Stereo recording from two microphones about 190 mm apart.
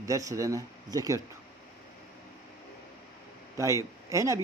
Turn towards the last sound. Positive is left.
turn(degrees=-15)  # may be behind; listen again after turning